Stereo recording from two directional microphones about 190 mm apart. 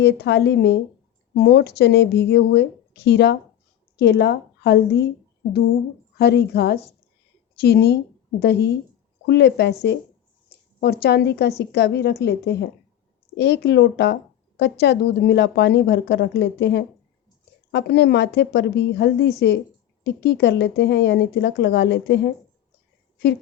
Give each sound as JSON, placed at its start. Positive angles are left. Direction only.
{"t": 0.0, "sound": "a woman's voice", "side_deg": 60}
{"t": 6.1, "sound": "a woman's voice", "side_deg": 60}